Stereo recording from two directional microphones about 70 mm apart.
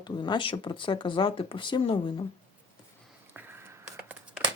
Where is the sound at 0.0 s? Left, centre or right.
Left.